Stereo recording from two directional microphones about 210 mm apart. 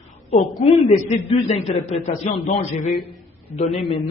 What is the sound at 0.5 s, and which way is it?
A man's voice, 25° left (ahead or behind).